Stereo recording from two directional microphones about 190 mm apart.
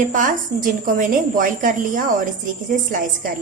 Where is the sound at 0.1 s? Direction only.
45° right (ahead or behind).